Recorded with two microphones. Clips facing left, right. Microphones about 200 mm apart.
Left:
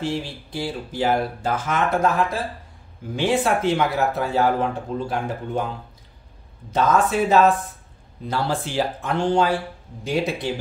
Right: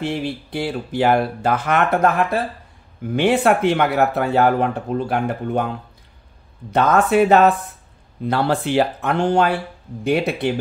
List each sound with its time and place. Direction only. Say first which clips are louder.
0.0 s speech: right 3 dB; 65° right (ahead or behind)
6.7 s speech: right 4 dB; 65° right (ahead or behind)